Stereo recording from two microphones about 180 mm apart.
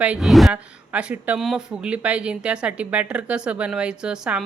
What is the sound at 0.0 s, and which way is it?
A woman's voice, 5° right (ahead or behind).